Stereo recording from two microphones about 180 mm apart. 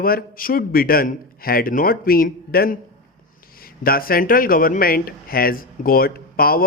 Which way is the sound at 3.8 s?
55° left (ahead or behind).